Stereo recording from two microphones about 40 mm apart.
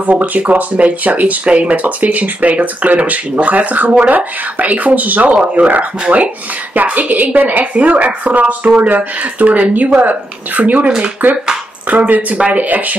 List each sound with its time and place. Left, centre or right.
0.0 s a woman's voice: right
11.9 s speech: right